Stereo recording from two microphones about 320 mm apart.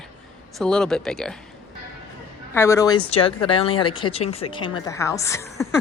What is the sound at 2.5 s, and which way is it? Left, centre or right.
A woman's voice, centre.